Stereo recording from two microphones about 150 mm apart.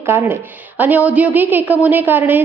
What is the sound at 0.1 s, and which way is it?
A woman's voice, 15° right (ahead or behind).